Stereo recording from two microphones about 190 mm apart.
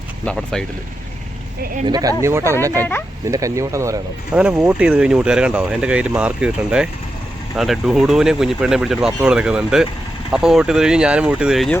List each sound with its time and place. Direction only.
0.3 s speech: centre (ahead or behind)
1.9 s speech: 20° right (ahead or behind); by 11.8 s centre (ahead or behind)